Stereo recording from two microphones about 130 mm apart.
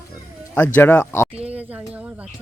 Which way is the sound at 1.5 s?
10° right (ahead or behind).